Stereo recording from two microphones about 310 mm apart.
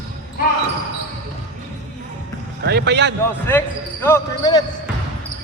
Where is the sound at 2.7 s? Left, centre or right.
Right.